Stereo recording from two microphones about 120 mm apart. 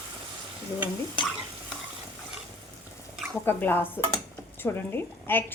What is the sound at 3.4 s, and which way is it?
A woman's voice, 15° left (ahead or behind).